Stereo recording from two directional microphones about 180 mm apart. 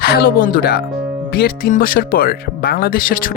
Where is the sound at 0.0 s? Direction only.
55° left (ahead or behind).